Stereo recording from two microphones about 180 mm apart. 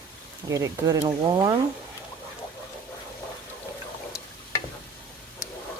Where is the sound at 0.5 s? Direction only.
20° right (ahead or behind).